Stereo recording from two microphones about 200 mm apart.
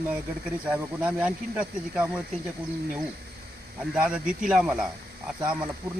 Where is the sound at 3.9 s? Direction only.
5° right (ahead or behind).